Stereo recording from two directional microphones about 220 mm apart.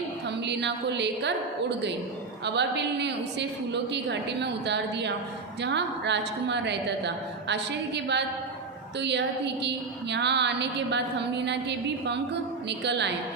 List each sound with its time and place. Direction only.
0.3 s a woman's voice: 50° right (ahead or behind)
2.4 s a woman's voice: 50° right (ahead or behind)